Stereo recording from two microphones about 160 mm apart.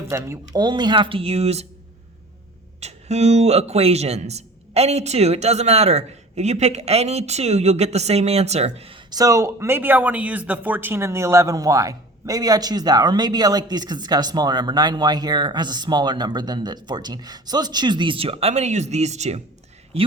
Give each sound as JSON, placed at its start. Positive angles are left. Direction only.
{"t": 0.1, "sound": "a man's voice", "side_deg": -20}
{"t": 2.8, "sound": "a man's voice", "side_deg": -45}